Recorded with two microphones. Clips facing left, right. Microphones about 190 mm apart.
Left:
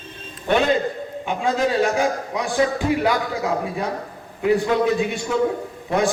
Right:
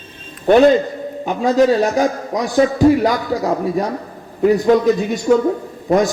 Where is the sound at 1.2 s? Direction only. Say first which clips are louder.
Right 8 dB; 40° right (ahead or behind).